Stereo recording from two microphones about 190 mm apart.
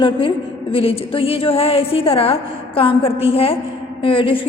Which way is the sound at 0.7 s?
30° left (ahead or behind).